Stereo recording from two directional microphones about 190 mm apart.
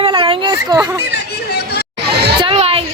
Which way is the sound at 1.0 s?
60° left (ahead or behind).